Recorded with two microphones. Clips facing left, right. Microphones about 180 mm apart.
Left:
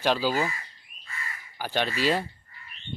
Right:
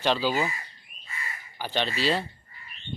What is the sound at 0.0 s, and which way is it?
Speech, 10° left (ahead or behind).